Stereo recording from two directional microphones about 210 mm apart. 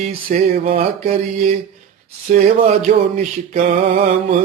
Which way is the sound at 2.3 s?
35° right (ahead or behind).